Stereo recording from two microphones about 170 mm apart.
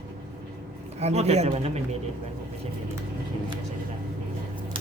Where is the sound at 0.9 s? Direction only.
40° right (ahead or behind).